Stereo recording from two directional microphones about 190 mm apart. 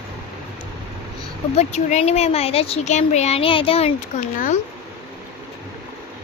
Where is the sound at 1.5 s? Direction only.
35° left (ahead or behind).